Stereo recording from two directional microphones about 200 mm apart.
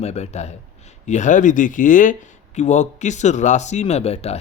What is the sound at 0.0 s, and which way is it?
Speech, 35° left (ahead or behind).